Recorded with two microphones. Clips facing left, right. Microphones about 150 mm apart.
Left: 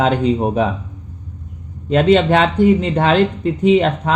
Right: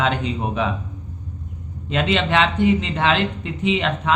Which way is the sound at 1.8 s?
45° left (ahead or behind).